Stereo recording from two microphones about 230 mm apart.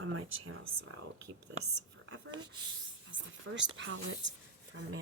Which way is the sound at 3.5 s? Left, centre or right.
Right.